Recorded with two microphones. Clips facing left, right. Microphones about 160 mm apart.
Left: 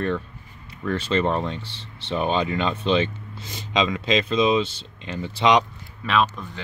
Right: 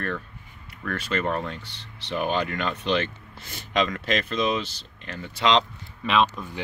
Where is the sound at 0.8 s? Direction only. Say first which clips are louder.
Left 5 dB; 25° left (ahead or behind).